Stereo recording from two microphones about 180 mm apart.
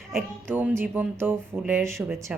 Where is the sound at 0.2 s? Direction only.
10° right (ahead or behind).